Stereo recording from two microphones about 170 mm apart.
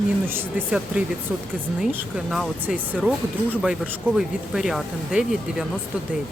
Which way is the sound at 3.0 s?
5° left (ahead or behind).